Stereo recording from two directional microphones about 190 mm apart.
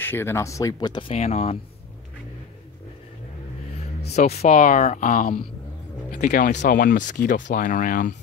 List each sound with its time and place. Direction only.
0.0 s speech: 10° left (ahead or behind); by 1.6 s 35° left (ahead or behind)
4.1 s speech: 35° left (ahead or behind)